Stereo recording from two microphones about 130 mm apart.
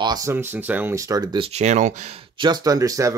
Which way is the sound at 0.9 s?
30° right (ahead or behind).